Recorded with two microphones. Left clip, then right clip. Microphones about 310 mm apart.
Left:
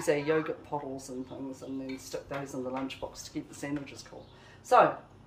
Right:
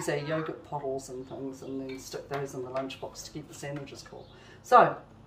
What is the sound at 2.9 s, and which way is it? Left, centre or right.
Speech, centre.